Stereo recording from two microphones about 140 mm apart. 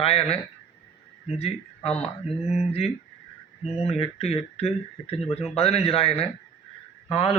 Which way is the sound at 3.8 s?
45° left (ahead or behind).